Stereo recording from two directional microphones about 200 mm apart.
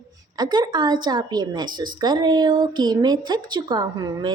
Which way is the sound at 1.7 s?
45° right (ahead or behind).